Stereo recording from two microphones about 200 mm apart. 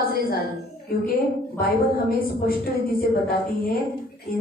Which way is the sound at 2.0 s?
45° left (ahead or behind).